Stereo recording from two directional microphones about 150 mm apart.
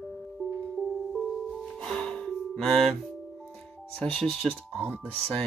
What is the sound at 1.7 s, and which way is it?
Music, 5° left (ahead or behind).